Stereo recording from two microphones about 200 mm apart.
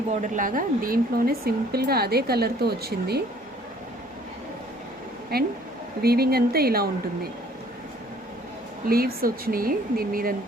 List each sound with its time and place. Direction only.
0.1 s speech: 40° right (ahead or behind)
5.3 s speech: 50° right (ahead or behind)
8.9 s speech: 50° right (ahead or behind)